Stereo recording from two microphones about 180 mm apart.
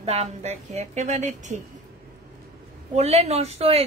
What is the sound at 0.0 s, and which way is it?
A woman's voice, 35° right (ahead or behind).